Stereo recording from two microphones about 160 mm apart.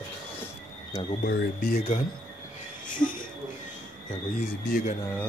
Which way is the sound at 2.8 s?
55° left (ahead or behind).